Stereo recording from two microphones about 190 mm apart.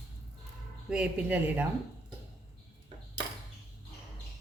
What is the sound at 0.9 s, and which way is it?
Speech, 5° right (ahead or behind).